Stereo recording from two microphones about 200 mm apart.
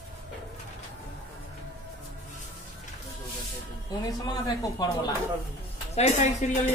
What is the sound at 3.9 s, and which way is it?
Speech, 20° left (ahead or behind).